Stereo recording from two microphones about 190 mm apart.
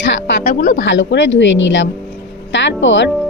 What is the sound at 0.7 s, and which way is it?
Speech, 70° left (ahead or behind).